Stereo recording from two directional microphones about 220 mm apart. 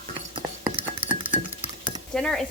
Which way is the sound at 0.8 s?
25° right (ahead or behind).